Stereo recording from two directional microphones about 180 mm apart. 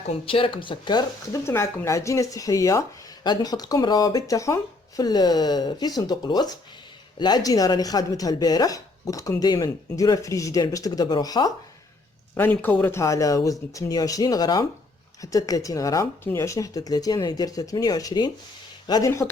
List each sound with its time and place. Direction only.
0.3 s speech: 30° left (ahead or behind)
3.2 s chopping: 20° left (ahead or behind)
12.3 s speech: 10° left (ahead or behind)
15.2 s chopping: 20° left (ahead or behind)